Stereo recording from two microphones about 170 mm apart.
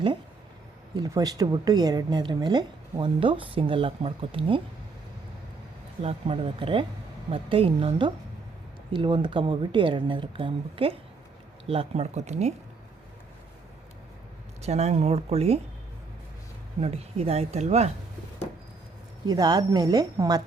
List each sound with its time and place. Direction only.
0.9 s a woman's voice: 20° right (ahead or behind)
6.0 s a woman's voice: 35° right (ahead or behind)
14.6 s speech: 40° right (ahead or behind)
16.8 s speech: 35° right (ahead or behind)
19.3 s a woman's voice: 25° right (ahead or behind)